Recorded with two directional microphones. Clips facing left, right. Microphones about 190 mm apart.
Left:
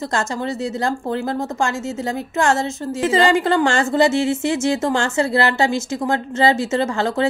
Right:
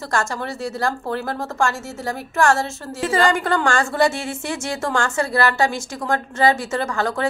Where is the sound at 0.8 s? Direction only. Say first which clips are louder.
Left 1 dB; 20° left (ahead or behind).